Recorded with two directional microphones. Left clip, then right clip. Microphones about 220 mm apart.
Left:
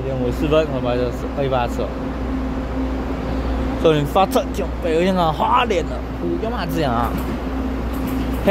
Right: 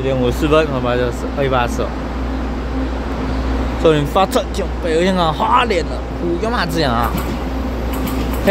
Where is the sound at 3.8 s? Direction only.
Centre (ahead or behind).